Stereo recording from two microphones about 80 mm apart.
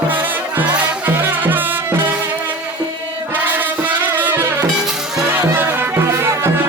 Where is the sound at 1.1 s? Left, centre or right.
Right.